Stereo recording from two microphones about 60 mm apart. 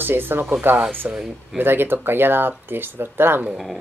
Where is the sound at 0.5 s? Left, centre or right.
Right.